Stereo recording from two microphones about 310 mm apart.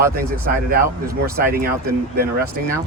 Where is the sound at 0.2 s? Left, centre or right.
Right.